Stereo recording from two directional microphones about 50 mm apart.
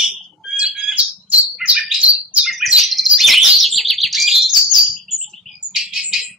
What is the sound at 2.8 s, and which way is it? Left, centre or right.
Bird, centre.